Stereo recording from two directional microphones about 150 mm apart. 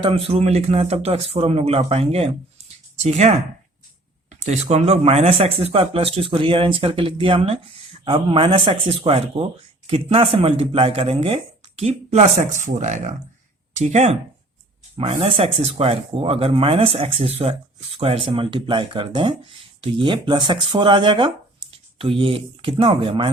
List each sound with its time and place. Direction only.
0.0 s speech: 40° right (ahead or behind)